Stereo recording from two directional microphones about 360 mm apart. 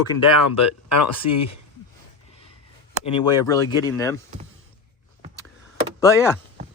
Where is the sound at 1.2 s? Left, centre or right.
Left.